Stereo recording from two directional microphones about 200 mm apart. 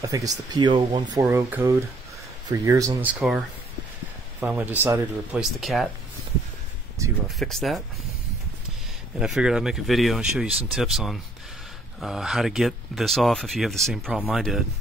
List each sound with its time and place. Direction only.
0.0 s speech: 15° right (ahead or behind)
1.2 s speech: 10° right (ahead or behind)
4.4 s speech: 10° right (ahead or behind)
7.2 s speech: centre (ahead or behind)
9.2 s speech: 5° right (ahead or behind)